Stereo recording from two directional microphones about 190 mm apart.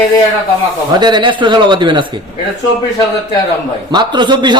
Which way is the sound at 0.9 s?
25° right (ahead or behind).